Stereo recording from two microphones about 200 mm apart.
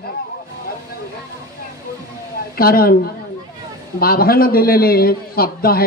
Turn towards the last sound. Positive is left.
turn(degrees=50)  # may be behind; listen again after turning